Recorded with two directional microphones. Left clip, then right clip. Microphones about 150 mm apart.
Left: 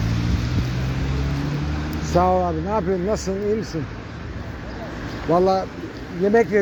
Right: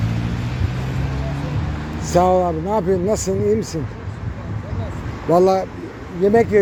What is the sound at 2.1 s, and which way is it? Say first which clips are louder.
Speech: right 3 dB; 35° right (ahead or behind).